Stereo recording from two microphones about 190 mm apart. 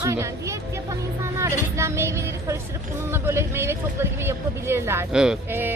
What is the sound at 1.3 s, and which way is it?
Music, 15° right (ahead or behind).